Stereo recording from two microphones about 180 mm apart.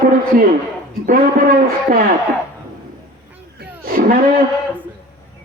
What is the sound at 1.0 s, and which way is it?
Speech, 50° right (ahead or behind).